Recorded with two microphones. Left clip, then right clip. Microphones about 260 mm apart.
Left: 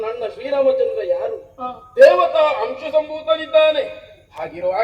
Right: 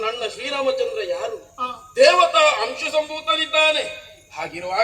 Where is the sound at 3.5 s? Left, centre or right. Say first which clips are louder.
Left 5 dB; right.